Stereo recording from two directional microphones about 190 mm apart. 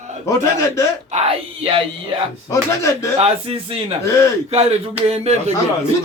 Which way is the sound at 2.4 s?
15° left (ahead or behind).